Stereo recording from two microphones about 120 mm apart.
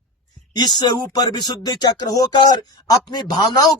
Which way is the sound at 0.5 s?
35° left (ahead or behind).